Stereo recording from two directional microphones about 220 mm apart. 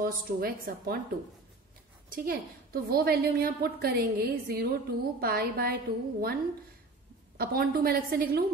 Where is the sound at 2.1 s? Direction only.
40° right (ahead or behind).